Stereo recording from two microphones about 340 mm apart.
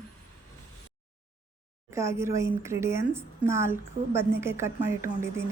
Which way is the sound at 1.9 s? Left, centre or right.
Centre.